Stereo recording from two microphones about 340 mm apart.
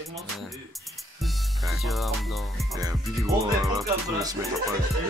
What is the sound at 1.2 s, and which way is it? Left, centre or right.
Music, centre.